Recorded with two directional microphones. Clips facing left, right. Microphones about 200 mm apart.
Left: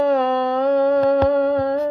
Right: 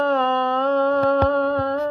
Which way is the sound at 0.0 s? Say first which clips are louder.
Left 3 dB; 15° left (ahead or behind).